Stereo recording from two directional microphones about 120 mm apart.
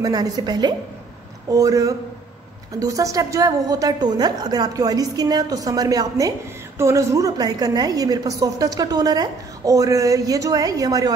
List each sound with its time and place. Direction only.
0.0 s a woman's voice: 30° right (ahead or behind)